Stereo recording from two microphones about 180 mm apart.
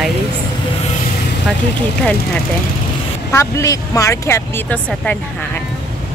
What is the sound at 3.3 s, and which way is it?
Speech, 20° left (ahead or behind).